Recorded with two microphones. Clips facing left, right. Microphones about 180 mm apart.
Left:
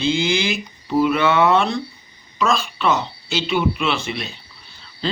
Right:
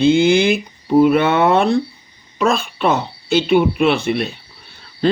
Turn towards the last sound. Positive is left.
turn(degrees=-55)  # may be behind; listen again after turning